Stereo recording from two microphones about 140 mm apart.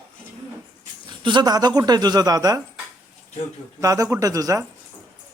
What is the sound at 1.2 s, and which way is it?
Speech, 30° right (ahead or behind).